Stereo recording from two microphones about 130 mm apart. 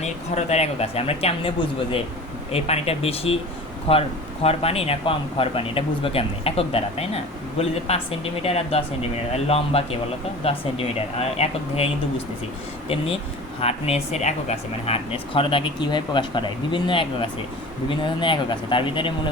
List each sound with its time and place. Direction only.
0.0 s speech: 60° left (ahead or behind)
4.4 s speech: 50° left (ahead or behind)
13.6 s speech: 50° left (ahead or behind)